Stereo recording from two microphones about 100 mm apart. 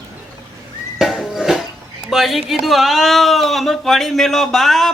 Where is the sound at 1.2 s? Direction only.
5° right (ahead or behind).